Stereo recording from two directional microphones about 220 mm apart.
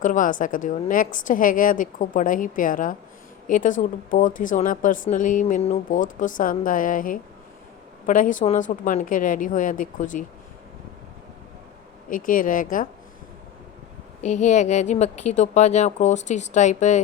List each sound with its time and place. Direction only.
0.0 s speech: 35° left (ahead or behind)
12.1 s speech: 40° left (ahead or behind)
14.2 s speech: 30° left (ahead or behind)